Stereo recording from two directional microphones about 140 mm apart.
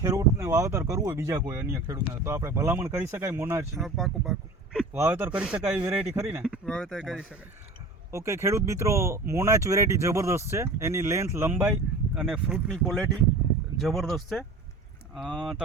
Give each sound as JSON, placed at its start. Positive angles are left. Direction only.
{"t": 0.0, "sound": "speech", "side_deg": -25}
{"t": 3.8, "sound": "speech", "side_deg": 0}
{"t": 4.9, "sound": "speech", "side_deg": -15}
{"t": 6.7, "sound": "speech", "side_deg": 5}
{"t": 8.1, "sound": "speech", "side_deg": -20}